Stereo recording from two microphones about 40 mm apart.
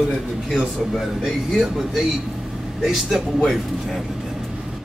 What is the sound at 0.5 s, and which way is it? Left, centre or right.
Speech, centre.